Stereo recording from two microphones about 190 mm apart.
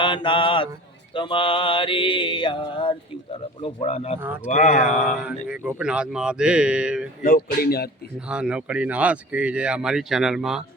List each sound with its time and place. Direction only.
0.0 s mantra: 25° left (ahead or behind)
3.6 s speech: 30° left (ahead or behind)
5.0 s speech: 5° right (ahead or behind)
7.2 s speech: 50° left (ahead or behind)
8.3 s speech: 5° right (ahead or behind)